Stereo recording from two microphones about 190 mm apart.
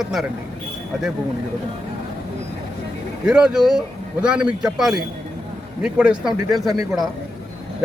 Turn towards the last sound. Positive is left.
turn(degrees=-20)  # may be behind; listen again after turning